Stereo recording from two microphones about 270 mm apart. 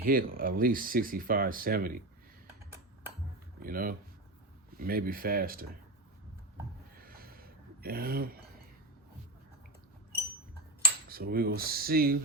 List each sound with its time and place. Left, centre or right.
0.0 s speech: right
3.6 s speech: right
7.0 s a sound: right
11.1 s speech: right